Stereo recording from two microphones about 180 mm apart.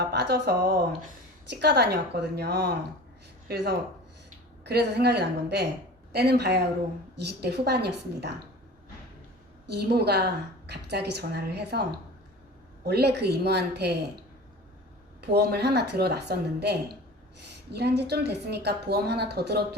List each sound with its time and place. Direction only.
0.0 s a woman's voice: 65° right (ahead or behind)
9.6 s a woman's voice: 65° right (ahead or behind)
15.3 s a woman's voice: 65° right (ahead or behind)